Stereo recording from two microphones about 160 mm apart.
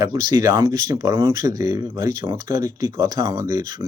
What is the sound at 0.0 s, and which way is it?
Speech, 20° right (ahead or behind).